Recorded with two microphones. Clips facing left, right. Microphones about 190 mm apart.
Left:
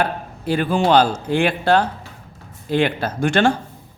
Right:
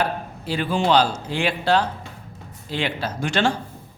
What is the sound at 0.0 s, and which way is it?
A man's voice, 55° left (ahead or behind).